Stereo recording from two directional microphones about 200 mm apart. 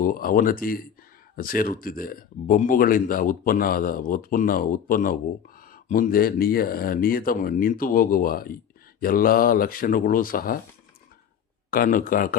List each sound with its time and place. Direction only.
0.0 s speech: 45° left (ahead or behind)
11.7 s speech: 45° left (ahead or behind)